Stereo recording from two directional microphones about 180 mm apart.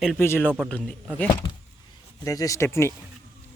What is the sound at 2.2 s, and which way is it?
Speech, 20° left (ahead or behind).